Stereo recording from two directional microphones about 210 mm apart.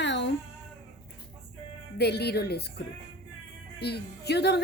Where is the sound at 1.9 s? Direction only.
50° left (ahead or behind).